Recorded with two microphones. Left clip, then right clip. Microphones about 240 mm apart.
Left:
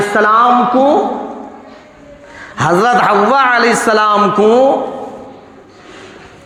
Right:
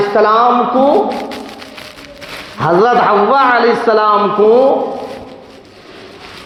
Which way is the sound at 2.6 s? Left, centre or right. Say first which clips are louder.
Even; left.